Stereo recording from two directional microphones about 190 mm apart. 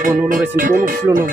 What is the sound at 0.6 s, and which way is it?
Speech, 45° right (ahead or behind).